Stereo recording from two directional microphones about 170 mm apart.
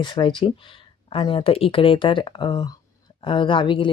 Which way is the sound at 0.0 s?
30° left (ahead or behind).